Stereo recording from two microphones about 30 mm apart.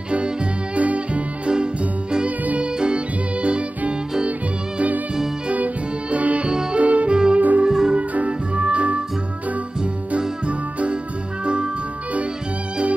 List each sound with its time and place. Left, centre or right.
0.7 s music: right
1.5 s music: right
2.2 s music: right
2.6 s music: right
6.0 s music: right
6.4 s music: right
6.8 s saxophone: right
7.3 s music: right
7.6 s music: centre
8.3 s music: right
10.4 s music: right